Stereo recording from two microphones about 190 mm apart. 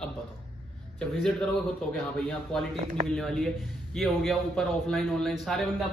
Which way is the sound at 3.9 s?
Centre (ahead or behind).